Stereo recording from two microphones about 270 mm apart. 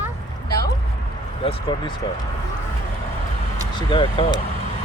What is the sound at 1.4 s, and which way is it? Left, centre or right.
Speech, centre.